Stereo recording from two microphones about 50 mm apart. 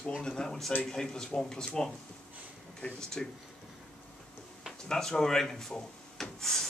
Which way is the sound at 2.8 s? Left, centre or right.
Centre.